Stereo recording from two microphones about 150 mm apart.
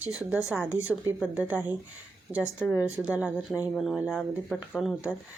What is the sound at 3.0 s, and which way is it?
A woman's voice, 5° right (ahead or behind).